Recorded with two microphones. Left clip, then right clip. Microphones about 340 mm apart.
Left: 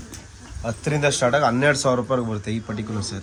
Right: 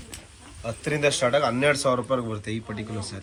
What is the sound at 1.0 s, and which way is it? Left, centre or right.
Speech, left.